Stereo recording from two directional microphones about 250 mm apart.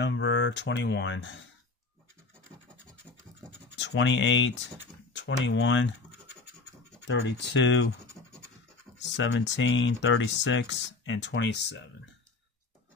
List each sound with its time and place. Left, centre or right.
0.0 s speech: left
3.7 s speech: left
7.1 s speech: left
9.1 s speech: left